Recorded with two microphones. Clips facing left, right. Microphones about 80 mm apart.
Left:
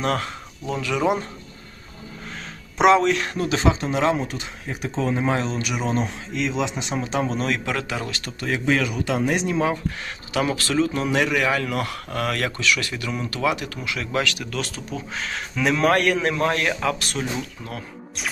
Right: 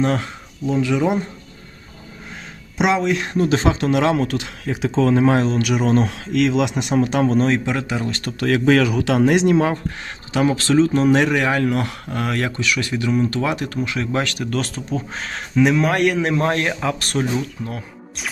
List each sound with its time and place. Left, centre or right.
0.0 s speech: right
2.7 s speech: centre
3.1 s speech: right
3.3 s speech: right
3.8 s speech: right
7.3 s speech: right
7.6 s speech: right
8.4 s speech: right
9.3 s speech: right
10.0 s speech: right
13.3 s speech: right
15.5 s speech: centre
17.0 s speech: right